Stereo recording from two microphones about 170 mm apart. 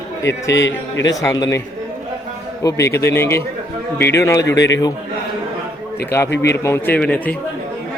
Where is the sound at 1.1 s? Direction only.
20° left (ahead or behind).